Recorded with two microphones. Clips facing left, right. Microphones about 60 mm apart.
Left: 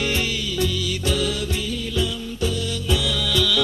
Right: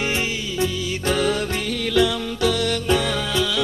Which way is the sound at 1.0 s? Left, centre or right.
Right.